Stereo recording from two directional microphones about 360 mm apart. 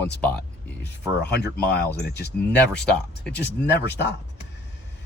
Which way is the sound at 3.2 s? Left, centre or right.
Centre.